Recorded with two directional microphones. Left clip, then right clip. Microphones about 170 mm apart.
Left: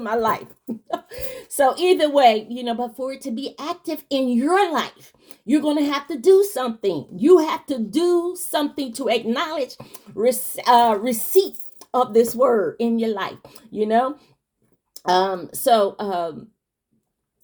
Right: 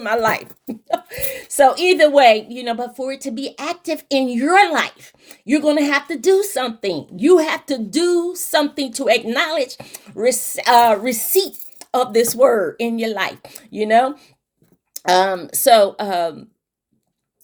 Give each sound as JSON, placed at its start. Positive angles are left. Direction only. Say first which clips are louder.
{"t": 0.1, "sound": "a woman's voice", "louder": "right 3 dB", "side_deg": -25}
{"t": 0.9, "sound": "a sound", "louder": "right 7 dB", "side_deg": -20}
{"t": 1.5, "sound": "a woman's voice", "louder": "right 4 dB", "side_deg": -20}